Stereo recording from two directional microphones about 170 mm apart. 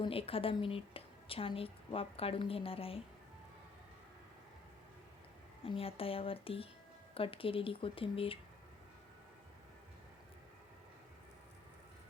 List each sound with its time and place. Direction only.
0.0 s a woman's voice: 35° left (ahead or behind)
5.6 s a woman's voice: 35° left (ahead or behind)